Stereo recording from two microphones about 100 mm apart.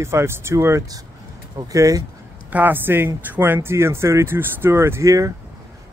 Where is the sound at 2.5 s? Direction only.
20° right (ahead or behind).